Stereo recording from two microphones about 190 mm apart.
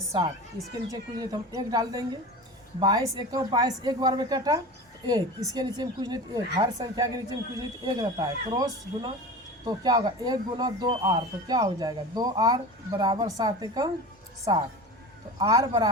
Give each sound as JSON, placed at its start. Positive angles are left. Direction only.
{"t": 0.1, "sound": "a woman's voice", "side_deg": -25}